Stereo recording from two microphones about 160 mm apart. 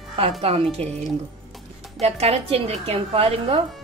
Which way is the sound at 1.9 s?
40° right (ahead or behind).